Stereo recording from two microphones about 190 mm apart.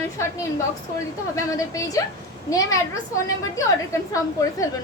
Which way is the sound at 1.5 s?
15° left (ahead or behind).